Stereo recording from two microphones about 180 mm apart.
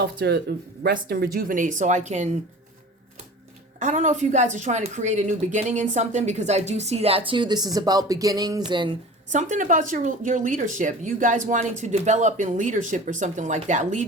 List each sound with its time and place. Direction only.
0.0 s speech: 65° right (ahead or behind); by 2.3 s 40° right (ahead or behind)
3.8 s a woman's voice: 45° right (ahead or behind); by 9.0 s 25° right (ahead or behind)
9.3 s speech: 45° right (ahead or behind)